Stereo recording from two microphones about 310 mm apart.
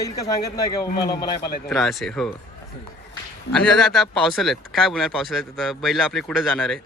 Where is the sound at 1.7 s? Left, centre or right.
Centre.